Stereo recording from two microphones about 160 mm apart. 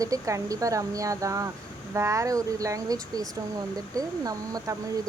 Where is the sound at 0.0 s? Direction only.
20° right (ahead or behind).